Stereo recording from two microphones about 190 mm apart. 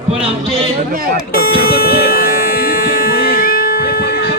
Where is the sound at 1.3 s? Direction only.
50° left (ahead or behind).